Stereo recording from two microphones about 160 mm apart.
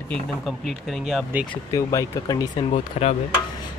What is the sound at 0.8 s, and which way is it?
Speech, centre (ahead or behind).